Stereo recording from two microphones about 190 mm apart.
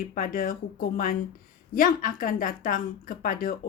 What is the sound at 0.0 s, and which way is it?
Speech, 45° left (ahead or behind).